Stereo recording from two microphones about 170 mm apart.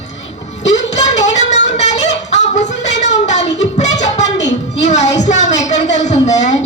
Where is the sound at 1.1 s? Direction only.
45° left (ahead or behind).